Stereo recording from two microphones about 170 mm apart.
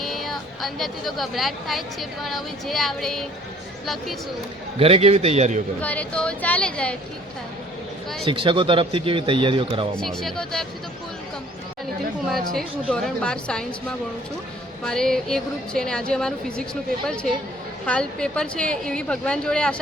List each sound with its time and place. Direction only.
0.0 s speech: centre (ahead or behind)
4.8 s a man's voice: 35° right (ahead or behind)
5.8 s a woman's voice: 10° left (ahead or behind)
8.2 s a man's voice: 30° right (ahead or behind)
9.9 s a woman's voice: 5° left (ahead or behind)
12.3 s a woman's voice: centre (ahead or behind)
17.8 s a woman's voice: 5° left (ahead or behind)